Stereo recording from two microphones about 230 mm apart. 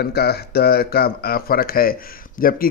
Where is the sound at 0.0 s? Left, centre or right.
Left.